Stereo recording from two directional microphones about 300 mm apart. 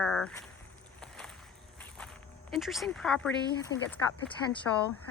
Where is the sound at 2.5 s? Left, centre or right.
Centre.